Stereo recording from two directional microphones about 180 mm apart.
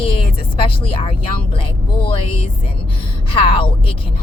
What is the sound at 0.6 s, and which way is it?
Speech, 30° left (ahead or behind).